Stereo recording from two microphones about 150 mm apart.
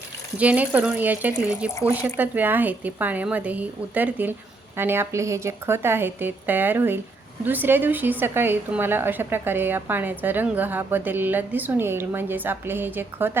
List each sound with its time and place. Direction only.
0.3 s a woman's voice: 10° right (ahead or behind)